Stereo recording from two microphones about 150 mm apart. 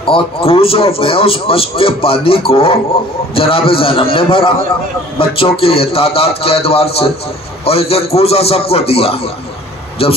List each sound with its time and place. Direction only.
0.0 s a man's voice: 40° left (ahead or behind)